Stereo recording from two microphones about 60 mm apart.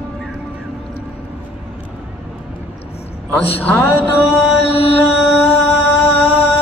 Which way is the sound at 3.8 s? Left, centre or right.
Left.